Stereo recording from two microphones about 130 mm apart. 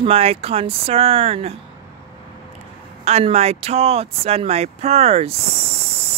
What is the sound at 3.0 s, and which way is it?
Speech, 55° right (ahead or behind).